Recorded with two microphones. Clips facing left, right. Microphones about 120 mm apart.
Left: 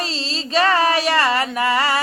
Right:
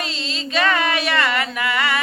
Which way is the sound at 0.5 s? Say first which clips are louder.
Left 3 dB; 35° left (ahead or behind).